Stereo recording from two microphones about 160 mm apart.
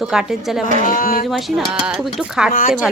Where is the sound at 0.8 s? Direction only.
60° left (ahead or behind).